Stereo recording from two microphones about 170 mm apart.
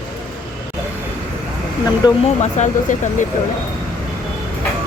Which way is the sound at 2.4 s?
45° left (ahead or behind).